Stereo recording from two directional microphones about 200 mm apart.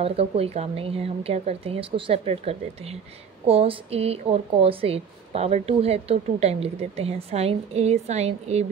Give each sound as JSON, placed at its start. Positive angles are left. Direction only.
{"t": 0.0, "sound": "speech", "side_deg": -30}